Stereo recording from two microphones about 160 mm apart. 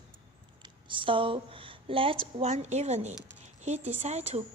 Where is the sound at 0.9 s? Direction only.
30° right (ahead or behind).